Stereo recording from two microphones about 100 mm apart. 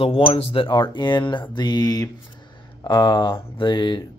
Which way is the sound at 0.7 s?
50° left (ahead or behind).